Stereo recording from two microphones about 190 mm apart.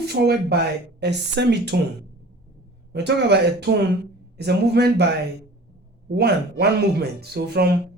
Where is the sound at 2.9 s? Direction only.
60° right (ahead or behind).